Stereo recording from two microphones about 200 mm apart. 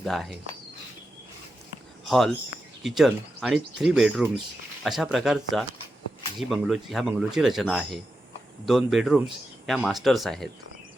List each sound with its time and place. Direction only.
0.0 s speech: centre (ahead or behind)
2.0 s speech: centre (ahead or behind)